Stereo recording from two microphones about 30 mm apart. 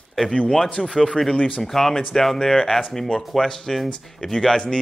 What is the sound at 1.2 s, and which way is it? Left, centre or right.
Speech, left.